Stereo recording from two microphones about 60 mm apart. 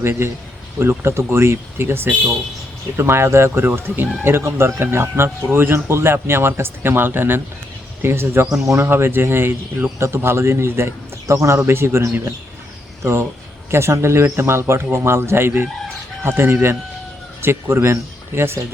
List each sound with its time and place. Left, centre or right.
0.0 s speech: right